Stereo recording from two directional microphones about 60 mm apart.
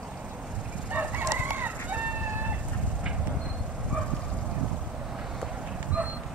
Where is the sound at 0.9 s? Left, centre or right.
Right.